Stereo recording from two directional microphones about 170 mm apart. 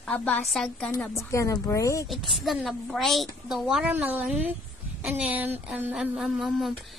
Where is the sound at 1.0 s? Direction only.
15° left (ahead or behind).